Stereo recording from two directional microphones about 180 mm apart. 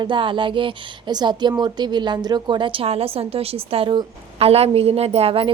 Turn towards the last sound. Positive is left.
turn(degrees=-30)  # may be behind; listen again after turning